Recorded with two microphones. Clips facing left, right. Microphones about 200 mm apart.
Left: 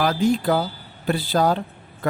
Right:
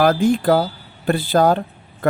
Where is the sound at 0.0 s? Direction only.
50° right (ahead or behind).